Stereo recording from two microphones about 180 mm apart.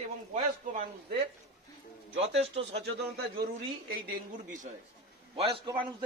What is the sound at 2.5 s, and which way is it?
Speech, 35° right (ahead or behind).